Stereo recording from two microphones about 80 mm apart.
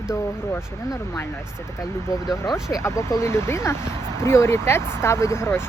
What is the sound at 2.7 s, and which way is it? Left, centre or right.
Speech, left.